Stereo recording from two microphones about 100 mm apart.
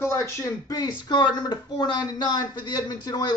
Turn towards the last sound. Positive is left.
turn(degrees=40)  # may be behind; listen again after turning